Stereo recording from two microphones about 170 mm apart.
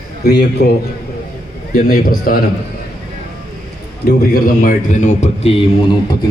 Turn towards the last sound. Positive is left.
turn(degrees=30)  # may be behind; listen again after turning